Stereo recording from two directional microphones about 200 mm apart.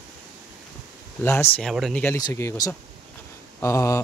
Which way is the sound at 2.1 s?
15° left (ahead or behind).